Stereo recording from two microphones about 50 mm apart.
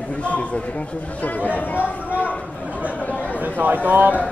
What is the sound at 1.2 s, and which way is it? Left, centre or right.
Speech, left.